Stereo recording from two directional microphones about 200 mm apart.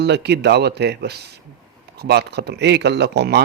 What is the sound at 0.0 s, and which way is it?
Speech, 55° right (ahead or behind).